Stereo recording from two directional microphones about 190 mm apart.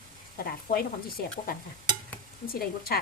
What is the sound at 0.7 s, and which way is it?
Speech, 50° left (ahead or behind).